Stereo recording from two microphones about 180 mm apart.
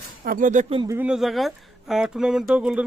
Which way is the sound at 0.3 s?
50° right (ahead or behind).